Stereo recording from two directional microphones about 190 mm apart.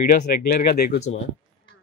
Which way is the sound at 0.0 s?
50° left (ahead or behind).